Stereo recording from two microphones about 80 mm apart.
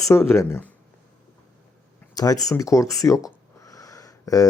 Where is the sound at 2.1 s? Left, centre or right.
Left.